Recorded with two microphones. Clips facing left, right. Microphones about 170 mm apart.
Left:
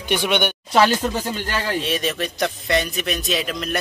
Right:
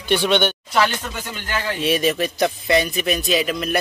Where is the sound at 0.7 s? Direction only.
35° left (ahead or behind).